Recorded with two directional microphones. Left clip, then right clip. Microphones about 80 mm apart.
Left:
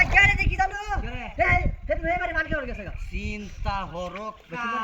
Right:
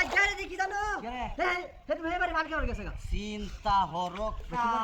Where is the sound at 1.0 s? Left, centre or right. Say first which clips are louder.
Left 6 dB; right.